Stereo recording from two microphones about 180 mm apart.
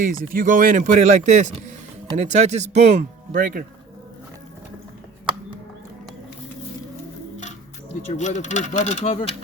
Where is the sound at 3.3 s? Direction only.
50° right (ahead or behind).